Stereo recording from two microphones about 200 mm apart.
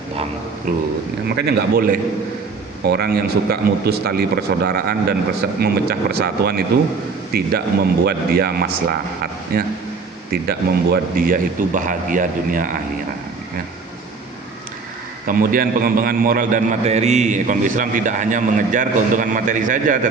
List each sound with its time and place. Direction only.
0.7 s speech: 40° right (ahead or behind)
10.4 s speech: 50° right (ahead or behind)
15.3 s a man's voice: 45° right (ahead or behind)